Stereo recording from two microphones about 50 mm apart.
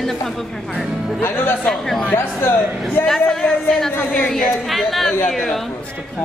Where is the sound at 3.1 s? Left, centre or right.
Centre.